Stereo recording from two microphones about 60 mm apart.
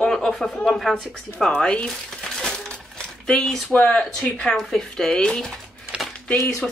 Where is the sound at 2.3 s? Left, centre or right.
Centre.